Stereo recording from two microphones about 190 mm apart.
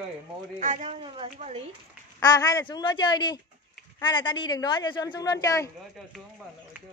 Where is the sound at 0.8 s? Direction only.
30° right (ahead or behind).